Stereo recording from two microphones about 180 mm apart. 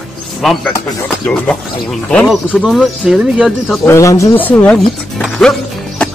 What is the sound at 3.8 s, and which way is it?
Speech, 15° left (ahead or behind).